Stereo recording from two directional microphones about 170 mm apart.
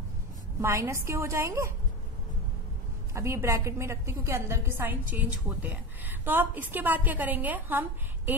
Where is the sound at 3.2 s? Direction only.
15° right (ahead or behind).